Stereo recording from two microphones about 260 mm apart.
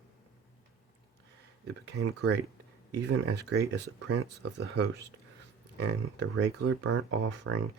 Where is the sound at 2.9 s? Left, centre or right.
Right.